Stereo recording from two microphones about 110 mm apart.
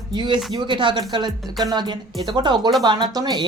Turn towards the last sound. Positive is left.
turn(degrees=-40)  # may be behind; listen again after turning